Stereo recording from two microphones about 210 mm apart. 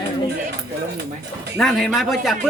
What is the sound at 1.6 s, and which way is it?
Speech, centre (ahead or behind).